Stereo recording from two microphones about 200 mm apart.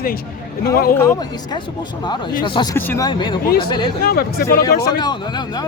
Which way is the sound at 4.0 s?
50° left (ahead or behind).